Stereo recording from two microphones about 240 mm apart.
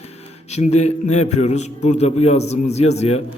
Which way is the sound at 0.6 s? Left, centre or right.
Left.